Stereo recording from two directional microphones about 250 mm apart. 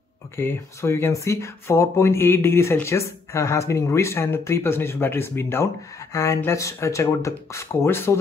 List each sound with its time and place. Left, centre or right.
0.4 s speech: centre